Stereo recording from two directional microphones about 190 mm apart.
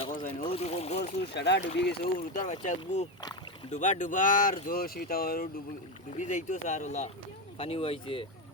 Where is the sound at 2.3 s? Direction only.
40° left (ahead or behind).